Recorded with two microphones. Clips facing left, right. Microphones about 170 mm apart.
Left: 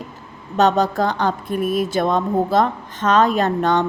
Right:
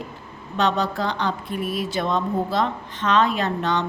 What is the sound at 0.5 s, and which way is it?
A woman's voice, 45° left (ahead or behind).